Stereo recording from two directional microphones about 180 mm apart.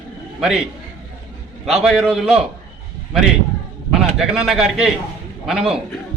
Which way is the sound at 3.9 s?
Centre (ahead or behind).